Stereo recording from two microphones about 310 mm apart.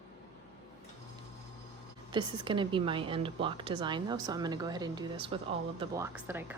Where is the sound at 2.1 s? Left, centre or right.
Centre.